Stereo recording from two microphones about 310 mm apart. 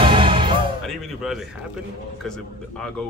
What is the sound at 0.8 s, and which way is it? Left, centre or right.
Music, centre.